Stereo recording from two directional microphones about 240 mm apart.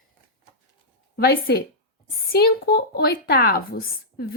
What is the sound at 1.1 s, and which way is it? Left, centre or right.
A woman's voice, left.